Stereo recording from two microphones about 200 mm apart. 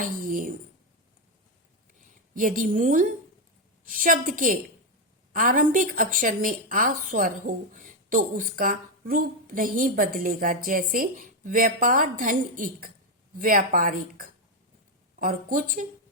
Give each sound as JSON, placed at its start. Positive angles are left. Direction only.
{"t": 0.0, "sound": "a woman's voice", "side_deg": -45}
{"t": 2.3, "sound": "a woman's voice", "side_deg": -40}